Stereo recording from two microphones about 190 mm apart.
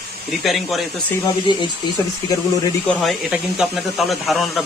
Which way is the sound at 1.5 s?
25° left (ahead or behind).